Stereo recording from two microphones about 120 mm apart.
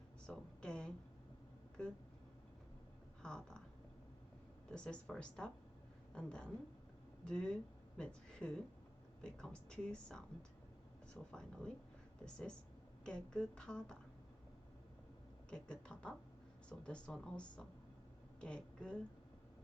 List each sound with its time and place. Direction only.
0.3 s a woman's voice: 5° left (ahead or behind)
3.2 s a sound: 5° left (ahead or behind)
4.7 s a woman's voice: 10° left (ahead or behind)
15.4 s a woman's voice: 5° left (ahead or behind)